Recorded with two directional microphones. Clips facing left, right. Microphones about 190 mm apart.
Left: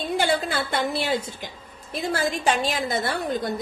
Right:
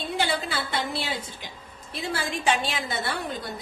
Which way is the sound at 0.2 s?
45° left (ahead or behind).